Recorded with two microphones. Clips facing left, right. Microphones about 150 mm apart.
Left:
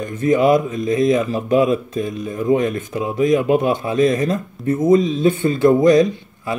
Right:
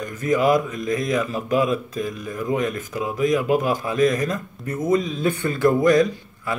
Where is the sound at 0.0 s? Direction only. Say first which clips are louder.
Left 4 dB; 30° left (ahead or behind).